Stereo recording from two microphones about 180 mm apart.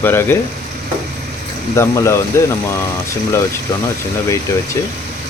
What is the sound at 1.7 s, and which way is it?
Speech, 15° left (ahead or behind).